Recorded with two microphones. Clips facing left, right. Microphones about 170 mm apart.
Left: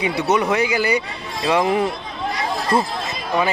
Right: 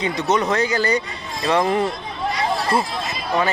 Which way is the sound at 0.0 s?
10° left (ahead or behind).